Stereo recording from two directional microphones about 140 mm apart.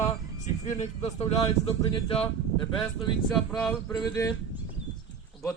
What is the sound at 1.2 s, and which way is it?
Speech, 40° left (ahead or behind).